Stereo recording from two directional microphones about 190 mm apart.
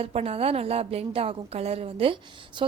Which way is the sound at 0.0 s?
30° right (ahead or behind).